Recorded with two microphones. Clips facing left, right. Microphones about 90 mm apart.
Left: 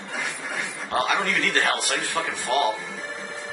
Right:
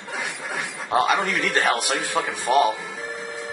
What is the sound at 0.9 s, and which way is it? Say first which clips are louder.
A man's voice: right 3 dB; 15° right (ahead or behind).